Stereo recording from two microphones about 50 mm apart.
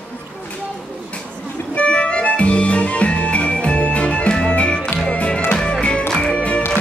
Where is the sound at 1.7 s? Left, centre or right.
Left.